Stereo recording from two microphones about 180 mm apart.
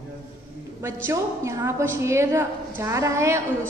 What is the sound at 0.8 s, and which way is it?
A woman's voice, 15° right (ahead or behind).